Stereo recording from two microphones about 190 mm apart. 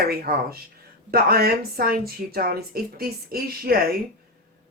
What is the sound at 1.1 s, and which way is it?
Speech, 50° right (ahead or behind).